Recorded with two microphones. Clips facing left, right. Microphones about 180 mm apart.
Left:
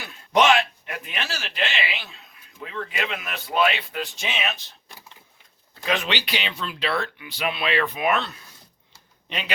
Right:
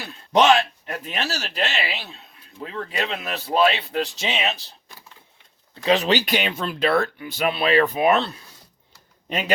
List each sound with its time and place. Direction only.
0.0 s speech: 35° right (ahead or behind)
5.8 s speech: 35° right (ahead or behind)